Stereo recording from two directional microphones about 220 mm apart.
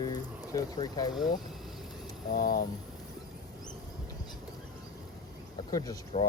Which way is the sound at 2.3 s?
40° left (ahead or behind).